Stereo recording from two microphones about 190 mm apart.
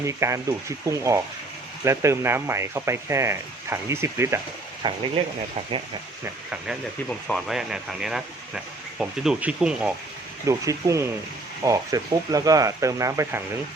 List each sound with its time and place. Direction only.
0.0 s speech: 15° right (ahead or behind)
4.8 s speech: 25° right (ahead or behind)
7.1 s speech: centre (ahead or behind)
10.4 s speech: 15° right (ahead or behind)